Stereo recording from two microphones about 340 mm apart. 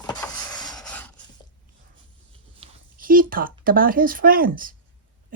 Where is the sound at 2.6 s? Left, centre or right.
Right.